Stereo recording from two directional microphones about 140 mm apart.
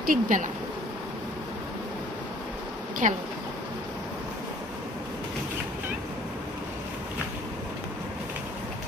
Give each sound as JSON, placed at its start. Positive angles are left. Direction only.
{"t": 0.0, "sound": "speech", "side_deg": -80}
{"t": 3.0, "sound": "speech", "side_deg": -60}